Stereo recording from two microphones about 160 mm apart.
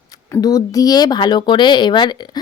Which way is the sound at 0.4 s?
20° left (ahead or behind).